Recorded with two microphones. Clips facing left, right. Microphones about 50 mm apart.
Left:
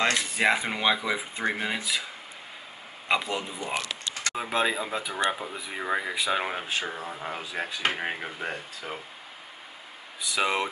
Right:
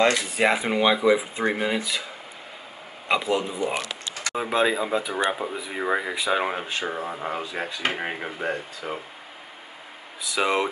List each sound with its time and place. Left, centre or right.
0.0 s speech: centre
3.1 s speech: centre
7.0 s speech: centre
7.3 s speech: centre
10.3 s speech: centre